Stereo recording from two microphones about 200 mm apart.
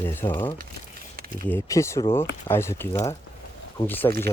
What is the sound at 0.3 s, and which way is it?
Speech, 25° left (ahead or behind).